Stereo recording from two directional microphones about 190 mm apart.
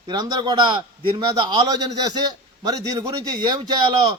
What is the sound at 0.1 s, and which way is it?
A man's voice, 20° right (ahead or behind).